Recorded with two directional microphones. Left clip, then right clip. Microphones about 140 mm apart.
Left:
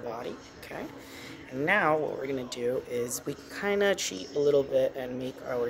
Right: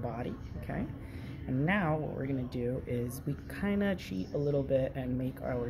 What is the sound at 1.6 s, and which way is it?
Speech, 30° left (ahead or behind).